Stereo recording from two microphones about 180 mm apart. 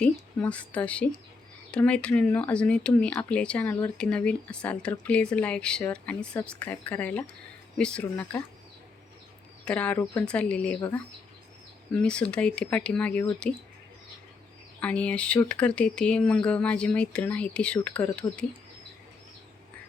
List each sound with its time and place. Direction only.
0.0 s speech: 5° left (ahead or behind)
9.6 s speech: 10° left (ahead or behind)
11.9 s speech: 5° left (ahead or behind)
14.8 s speech: 5° left (ahead or behind)